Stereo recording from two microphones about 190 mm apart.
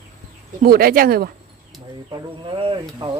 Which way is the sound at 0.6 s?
50° right (ahead or behind).